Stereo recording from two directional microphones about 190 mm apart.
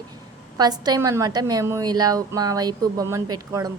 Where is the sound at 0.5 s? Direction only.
20° right (ahead or behind).